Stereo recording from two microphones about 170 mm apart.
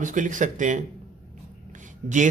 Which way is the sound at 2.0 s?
45° right (ahead or behind).